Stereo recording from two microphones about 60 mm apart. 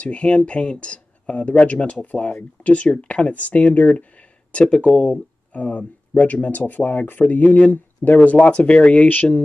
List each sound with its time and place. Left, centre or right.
0.0 s speech: left